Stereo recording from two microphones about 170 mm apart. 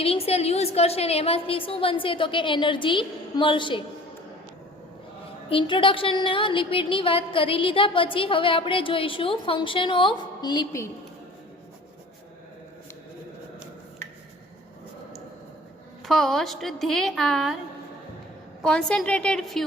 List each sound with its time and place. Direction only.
0.0 s a woman's voice: 35° left (ahead or behind)
5.5 s a woman's voice: 30° left (ahead or behind)
16.0 s a woman's voice: centre (ahead or behind)
18.6 s a woman's voice: 5° left (ahead or behind)